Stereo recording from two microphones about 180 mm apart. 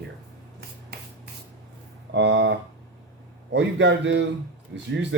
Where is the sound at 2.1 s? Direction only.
80° right.